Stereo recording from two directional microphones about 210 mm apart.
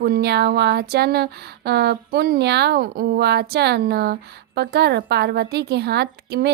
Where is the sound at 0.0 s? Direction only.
50° right (ahead or behind).